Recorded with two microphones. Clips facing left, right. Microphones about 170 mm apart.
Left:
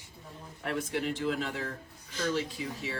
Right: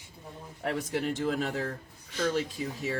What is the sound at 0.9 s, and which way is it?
Speech, 45° right (ahead or behind).